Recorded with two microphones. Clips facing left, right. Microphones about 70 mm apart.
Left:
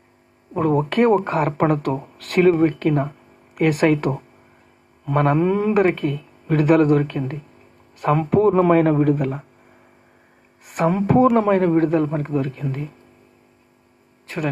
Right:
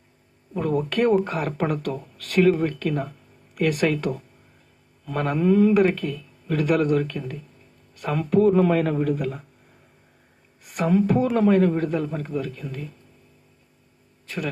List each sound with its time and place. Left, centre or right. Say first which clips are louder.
0.5 s speech: left 5 dB; left
2.4 s speech: left 4 dB; left
5.0 s speech: left 4 dB; left
6.6 s speech: left 5 dB; left
7.0 s speech: left 5 dB; left
10.7 s speech: left 2 dB; left
14.3 s speech: left 5 dB; left